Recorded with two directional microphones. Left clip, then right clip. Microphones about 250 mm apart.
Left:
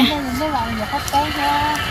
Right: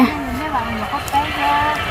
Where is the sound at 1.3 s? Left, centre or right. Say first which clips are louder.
Right 2 dB; right.